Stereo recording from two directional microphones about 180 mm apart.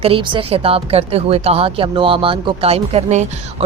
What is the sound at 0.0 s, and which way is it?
Speech, 30° right (ahead or behind).